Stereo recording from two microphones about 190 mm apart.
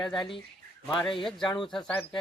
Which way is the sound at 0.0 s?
Centre (ahead or behind).